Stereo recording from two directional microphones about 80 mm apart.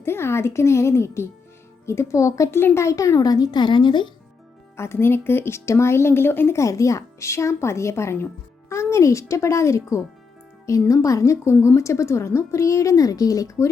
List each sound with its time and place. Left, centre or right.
0.0 s a woman's voice: left
2.6 s speech: left
4.8 s a woman's voice: left
6.6 s a woman's voice: left